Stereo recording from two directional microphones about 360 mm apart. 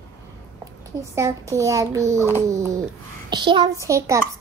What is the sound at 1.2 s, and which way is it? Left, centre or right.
A child's voice, centre.